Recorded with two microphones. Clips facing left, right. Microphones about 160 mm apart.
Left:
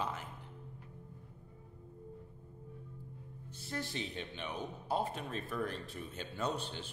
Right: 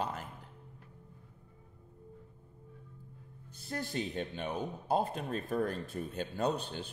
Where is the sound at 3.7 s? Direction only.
45° right (ahead or behind).